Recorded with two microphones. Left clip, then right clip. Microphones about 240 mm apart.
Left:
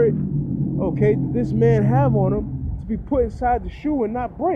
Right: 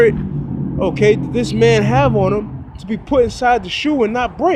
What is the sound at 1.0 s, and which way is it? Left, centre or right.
Speech, right.